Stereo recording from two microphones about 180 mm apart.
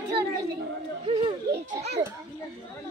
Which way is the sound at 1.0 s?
30° right (ahead or behind).